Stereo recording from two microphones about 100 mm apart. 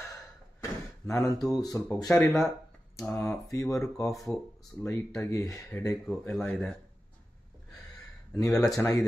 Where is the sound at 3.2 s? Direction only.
30° left (ahead or behind).